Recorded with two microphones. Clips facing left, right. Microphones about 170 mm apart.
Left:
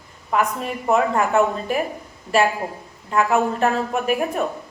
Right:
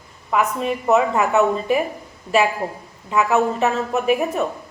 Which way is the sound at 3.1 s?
5° right (ahead or behind).